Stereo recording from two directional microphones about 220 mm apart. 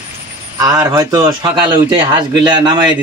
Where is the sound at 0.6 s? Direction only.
15° right (ahead or behind).